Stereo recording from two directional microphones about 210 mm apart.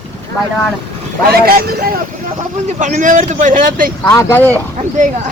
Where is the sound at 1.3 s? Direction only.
45° right (ahead or behind).